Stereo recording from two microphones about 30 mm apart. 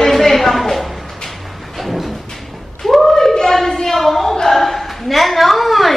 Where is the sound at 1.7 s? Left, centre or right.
Centre.